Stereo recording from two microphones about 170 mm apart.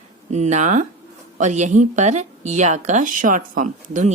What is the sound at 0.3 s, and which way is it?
Speech, 40° right (ahead or behind).